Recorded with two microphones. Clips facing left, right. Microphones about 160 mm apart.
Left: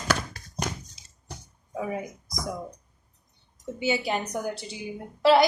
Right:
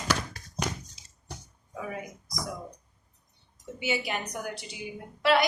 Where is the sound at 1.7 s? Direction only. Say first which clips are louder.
Left 6 dB; 25° left (ahead or behind).